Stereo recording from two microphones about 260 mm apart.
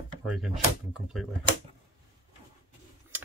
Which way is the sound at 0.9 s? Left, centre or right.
Centre.